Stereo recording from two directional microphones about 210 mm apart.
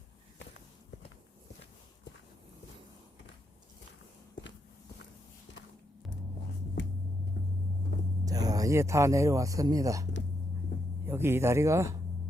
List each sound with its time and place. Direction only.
6.8 s hum: 60° left (ahead or behind)
8.2 s speech: 15° right (ahead or behind)